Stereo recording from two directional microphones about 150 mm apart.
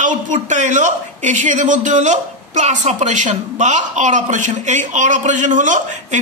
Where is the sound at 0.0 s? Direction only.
55° right (ahead or behind).